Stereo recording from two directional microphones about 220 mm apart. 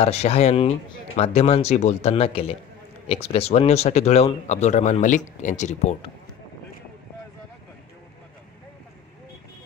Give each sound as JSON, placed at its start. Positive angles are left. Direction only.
{"t": 0.0, "sound": "speech", "side_deg": 30}